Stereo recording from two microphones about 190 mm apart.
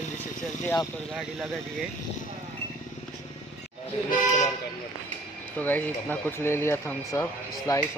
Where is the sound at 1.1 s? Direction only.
Centre (ahead or behind).